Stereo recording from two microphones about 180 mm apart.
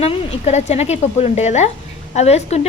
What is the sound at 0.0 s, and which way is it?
A woman's voice, 35° left (ahead or behind).